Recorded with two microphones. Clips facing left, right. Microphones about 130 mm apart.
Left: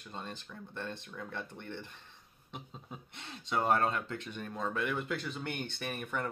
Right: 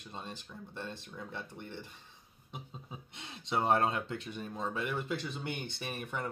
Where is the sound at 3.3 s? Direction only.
25° right (ahead or behind).